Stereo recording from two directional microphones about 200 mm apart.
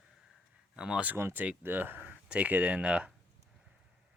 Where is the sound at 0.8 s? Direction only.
5° right (ahead or behind).